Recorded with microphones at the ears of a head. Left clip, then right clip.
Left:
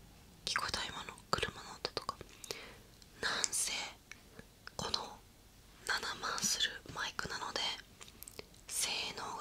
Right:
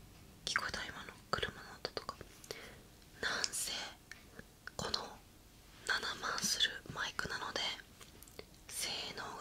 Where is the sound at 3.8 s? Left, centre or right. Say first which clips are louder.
Left 1 dB; centre.